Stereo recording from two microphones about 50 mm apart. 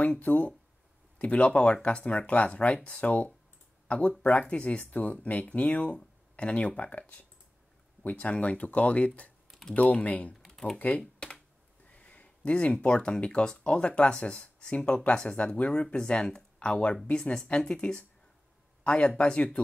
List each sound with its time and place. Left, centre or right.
0.2 s speech: left
9.5 s typing: centre
9.8 s speech: left
10.3 s typing: centre
10.8 s speech: left